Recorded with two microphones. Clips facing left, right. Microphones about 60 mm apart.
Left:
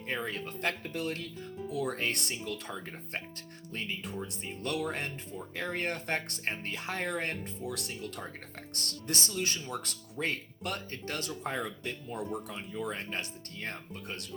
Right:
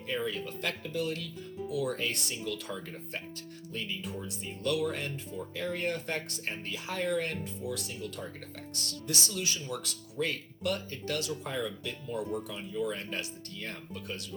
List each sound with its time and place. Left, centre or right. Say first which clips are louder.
0.1 s speech: right 2 dB; left